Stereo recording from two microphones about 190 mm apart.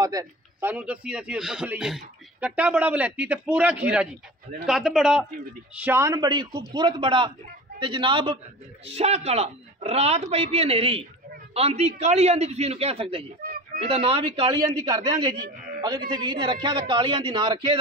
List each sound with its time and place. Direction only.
0.0 s a man's voice: 20° right (ahead or behind)